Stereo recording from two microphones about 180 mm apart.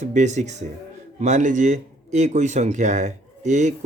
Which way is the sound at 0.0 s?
40° right (ahead or behind).